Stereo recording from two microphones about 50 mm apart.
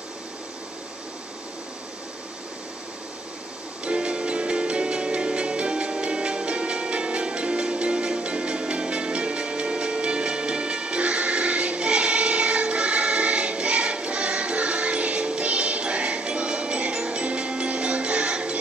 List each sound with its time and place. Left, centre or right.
3.8 s music: right